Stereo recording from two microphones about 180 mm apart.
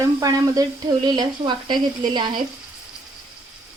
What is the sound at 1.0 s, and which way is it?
Speech, 25° right (ahead or behind).